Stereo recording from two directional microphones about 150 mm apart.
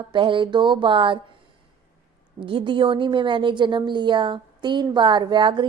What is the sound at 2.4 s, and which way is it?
A woman's voice, 35° right (ahead or behind).